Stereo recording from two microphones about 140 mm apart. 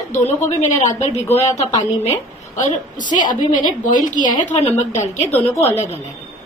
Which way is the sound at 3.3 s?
30° left (ahead or behind).